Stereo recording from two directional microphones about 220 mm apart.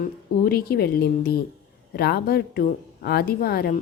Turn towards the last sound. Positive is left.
turn(degrees=45)  # may be behind; listen again after turning